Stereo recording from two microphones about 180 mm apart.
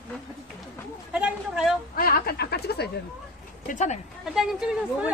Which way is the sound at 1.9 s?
55° left (ahead or behind).